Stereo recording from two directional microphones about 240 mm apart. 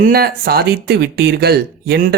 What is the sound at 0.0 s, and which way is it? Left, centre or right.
Speech, right.